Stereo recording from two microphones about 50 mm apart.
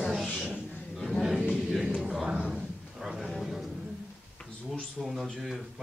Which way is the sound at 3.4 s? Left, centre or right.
Centre.